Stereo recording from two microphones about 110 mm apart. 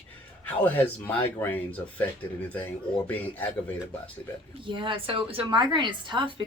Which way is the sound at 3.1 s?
15° left (ahead or behind).